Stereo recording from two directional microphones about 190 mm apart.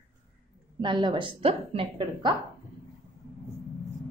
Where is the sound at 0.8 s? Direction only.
25° right (ahead or behind).